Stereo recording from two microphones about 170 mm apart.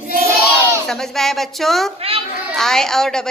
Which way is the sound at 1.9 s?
35° right (ahead or behind).